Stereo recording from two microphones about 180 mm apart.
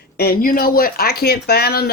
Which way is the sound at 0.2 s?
55° left (ahead or behind).